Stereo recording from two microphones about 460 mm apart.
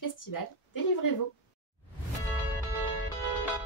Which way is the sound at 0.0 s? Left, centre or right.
Left.